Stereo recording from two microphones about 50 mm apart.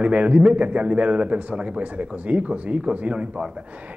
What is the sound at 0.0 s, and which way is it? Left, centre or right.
A man's voice, right.